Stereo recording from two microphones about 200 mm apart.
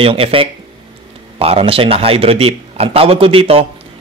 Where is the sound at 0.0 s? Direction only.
25° right (ahead or behind).